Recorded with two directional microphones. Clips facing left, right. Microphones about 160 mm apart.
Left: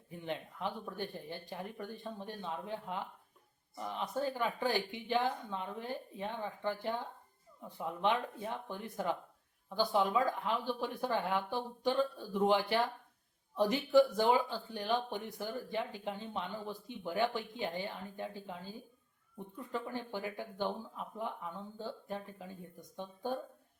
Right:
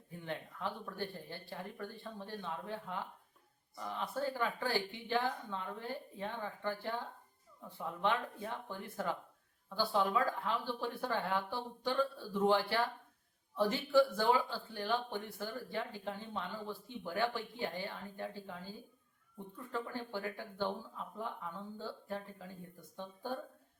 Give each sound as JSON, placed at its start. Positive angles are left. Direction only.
{"t": 0.1, "sound": "speech", "side_deg": 20}